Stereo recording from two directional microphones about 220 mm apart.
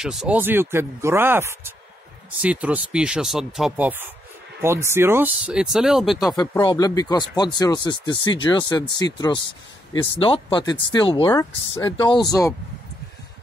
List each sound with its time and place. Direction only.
0.0 s speech: centre (ahead or behind)
6.1 s speech: 15° left (ahead or behind)